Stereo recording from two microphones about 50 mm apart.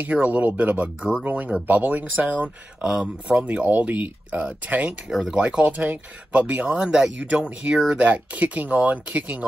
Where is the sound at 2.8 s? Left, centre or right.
Centre.